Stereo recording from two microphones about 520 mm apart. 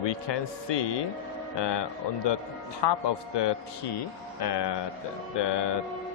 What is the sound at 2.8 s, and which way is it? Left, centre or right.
Speech, left.